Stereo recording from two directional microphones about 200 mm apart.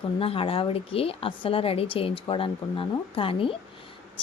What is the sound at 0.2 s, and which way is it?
A woman's voice, 30° left (ahead or behind).